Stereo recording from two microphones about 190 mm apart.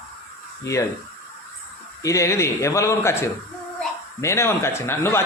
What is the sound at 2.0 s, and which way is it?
Speech, 15° left (ahead or behind).